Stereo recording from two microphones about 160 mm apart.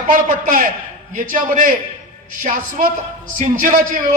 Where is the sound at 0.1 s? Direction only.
55° right (ahead or behind).